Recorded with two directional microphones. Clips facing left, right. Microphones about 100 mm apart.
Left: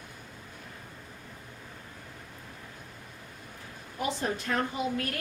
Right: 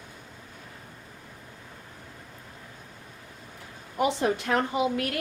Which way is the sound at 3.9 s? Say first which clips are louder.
Right 6 dB; 75° right (ahead or behind).